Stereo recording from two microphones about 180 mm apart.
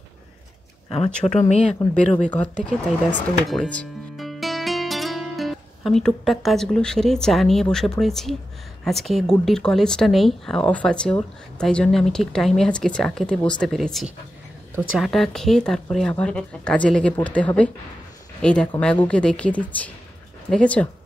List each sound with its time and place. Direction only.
0.8 s speech: 35° left (ahead or behind)
2.2 s speech: 5° left (ahead or behind)